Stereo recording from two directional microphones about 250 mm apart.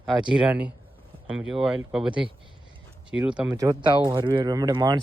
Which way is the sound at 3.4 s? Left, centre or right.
Centre.